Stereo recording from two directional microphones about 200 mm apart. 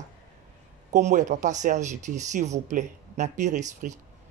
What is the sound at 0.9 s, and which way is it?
Speech, 35° right (ahead or behind).